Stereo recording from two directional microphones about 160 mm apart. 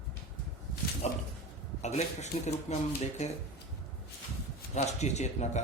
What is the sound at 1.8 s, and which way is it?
Speech, 45° left (ahead or behind).